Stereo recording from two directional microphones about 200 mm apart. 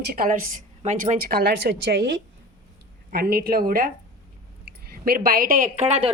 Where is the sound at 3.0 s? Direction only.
50° right (ahead or behind).